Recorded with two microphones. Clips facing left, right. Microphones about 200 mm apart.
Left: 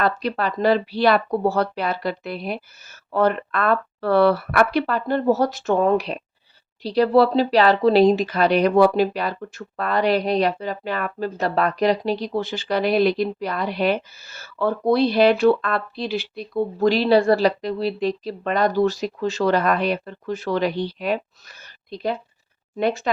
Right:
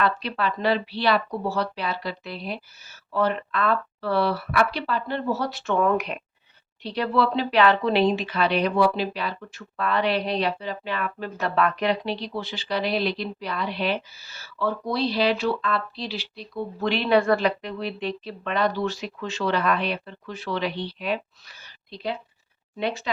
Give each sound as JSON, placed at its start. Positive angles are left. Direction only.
{"t": 0.0, "sound": "speech", "side_deg": 45}